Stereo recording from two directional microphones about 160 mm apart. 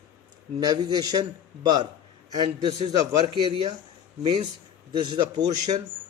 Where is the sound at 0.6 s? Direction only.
25° right (ahead or behind).